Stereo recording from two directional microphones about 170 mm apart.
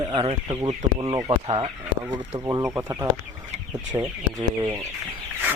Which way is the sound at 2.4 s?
20° right (ahead or behind).